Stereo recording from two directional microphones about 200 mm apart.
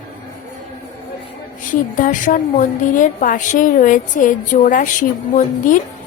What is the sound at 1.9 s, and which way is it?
A woman's voice, 40° left (ahead or behind).